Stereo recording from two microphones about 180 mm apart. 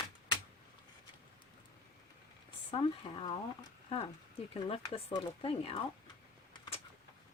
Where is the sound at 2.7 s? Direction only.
30° left (ahead or behind).